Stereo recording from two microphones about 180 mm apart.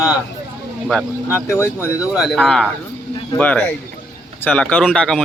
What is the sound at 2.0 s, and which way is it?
Speech, centre (ahead or behind).